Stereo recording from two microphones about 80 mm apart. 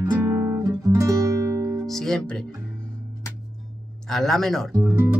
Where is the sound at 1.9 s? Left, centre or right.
Centre.